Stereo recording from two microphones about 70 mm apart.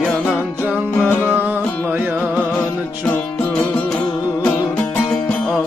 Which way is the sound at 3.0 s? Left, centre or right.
Centre.